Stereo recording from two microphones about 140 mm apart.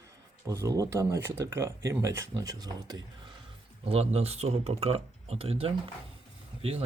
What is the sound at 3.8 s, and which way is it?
Speech, 45° right (ahead or behind).